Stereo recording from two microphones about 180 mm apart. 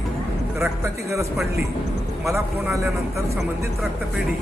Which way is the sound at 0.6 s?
15° right (ahead or behind).